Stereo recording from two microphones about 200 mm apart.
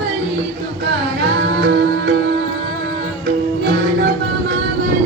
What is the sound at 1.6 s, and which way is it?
Music, 65° right (ahead or behind).